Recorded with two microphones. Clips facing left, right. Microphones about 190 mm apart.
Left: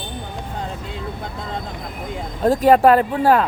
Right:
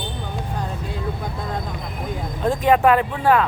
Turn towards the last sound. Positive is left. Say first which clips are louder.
# left 2 dB
turn(degrees=40)  # may be behind; listen again after turning